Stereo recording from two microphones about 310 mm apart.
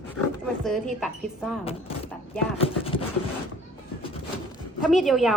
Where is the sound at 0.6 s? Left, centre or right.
Centre.